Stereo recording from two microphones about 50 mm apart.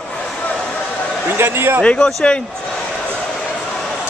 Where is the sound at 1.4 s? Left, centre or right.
Right.